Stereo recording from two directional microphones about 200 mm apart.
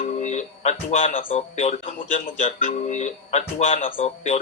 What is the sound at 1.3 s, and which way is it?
Speech, 30° left (ahead or behind).